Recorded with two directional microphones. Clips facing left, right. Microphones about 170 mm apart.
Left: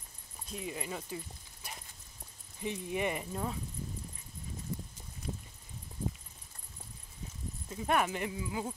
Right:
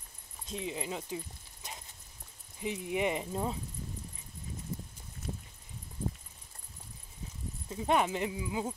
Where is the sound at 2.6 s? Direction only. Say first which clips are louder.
Right 2 dB; 15° right (ahead or behind).